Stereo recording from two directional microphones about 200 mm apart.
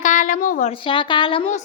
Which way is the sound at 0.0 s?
40° left (ahead or behind).